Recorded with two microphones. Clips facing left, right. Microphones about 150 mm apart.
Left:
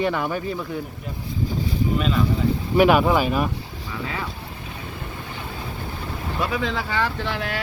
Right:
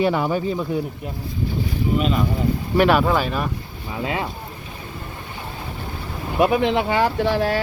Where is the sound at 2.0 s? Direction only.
5° right (ahead or behind).